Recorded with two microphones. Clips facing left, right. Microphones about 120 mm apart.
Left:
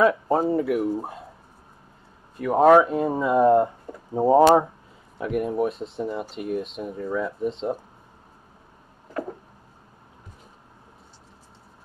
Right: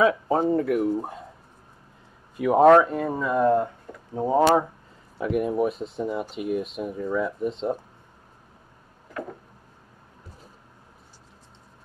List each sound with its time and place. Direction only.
0.0 s speech: centre (ahead or behind)
2.3 s speech: 10° right (ahead or behind)
2.6 s speech: 10° left (ahead or behind)
5.1 s speech: centre (ahead or behind)